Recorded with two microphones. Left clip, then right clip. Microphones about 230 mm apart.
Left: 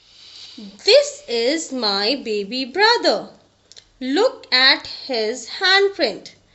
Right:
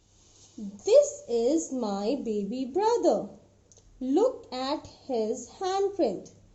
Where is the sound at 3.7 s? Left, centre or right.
Left.